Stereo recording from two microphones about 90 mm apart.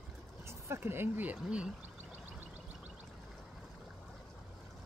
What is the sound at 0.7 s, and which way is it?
Speech, 25° right (ahead or behind).